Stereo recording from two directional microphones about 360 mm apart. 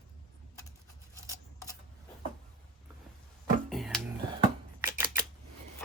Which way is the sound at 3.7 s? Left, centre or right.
Centre.